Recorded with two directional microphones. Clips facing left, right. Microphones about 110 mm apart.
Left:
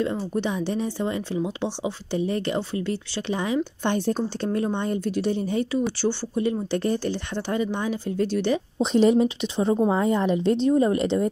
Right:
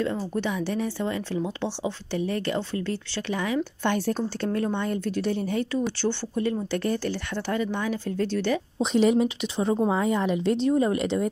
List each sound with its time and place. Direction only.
0.0 s speech: 20° left (ahead or behind)
5.7 s speech: 10° left (ahead or behind)
8.9 s speech: 30° left (ahead or behind)